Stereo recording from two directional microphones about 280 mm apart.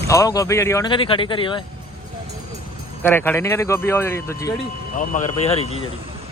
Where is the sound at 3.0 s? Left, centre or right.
Centre.